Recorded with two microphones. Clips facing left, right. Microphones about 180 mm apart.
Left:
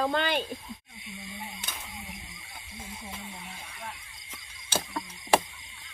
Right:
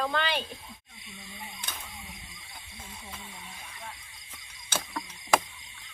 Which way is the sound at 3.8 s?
65° left (ahead or behind).